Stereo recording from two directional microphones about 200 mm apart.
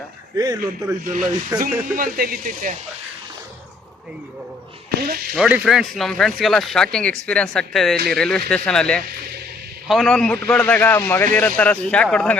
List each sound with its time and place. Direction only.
0.3 s speech: 20° right (ahead or behind)
0.6 s speech: 40° right (ahead or behind)
1.5 s speech: 10° right (ahead or behind)
2.0 s speech: 45° right (ahead or behind)
4.9 s speech: 50° right (ahead or behind)
5.3 s a man's voice: 5° right (ahead or behind)